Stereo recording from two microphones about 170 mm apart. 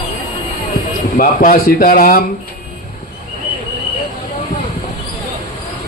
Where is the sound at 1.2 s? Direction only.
55° left (ahead or behind).